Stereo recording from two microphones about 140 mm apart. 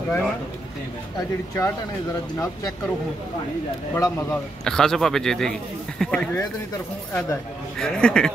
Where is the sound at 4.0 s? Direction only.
20° left (ahead or behind).